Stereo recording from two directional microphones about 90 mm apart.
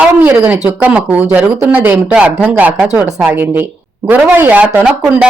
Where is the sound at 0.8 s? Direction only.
15° right (ahead or behind).